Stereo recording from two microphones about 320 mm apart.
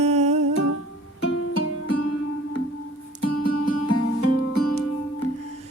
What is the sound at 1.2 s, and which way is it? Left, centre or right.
Music, left.